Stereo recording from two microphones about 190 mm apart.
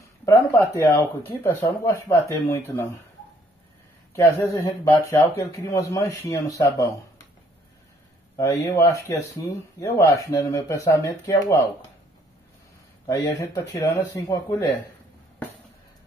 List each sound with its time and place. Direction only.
0.2 s speech: 15° left (ahead or behind)
4.1 s speech: 15° left (ahead or behind)
8.4 s speech: 15° left (ahead or behind)
13.0 s speech: 20° left (ahead or behind)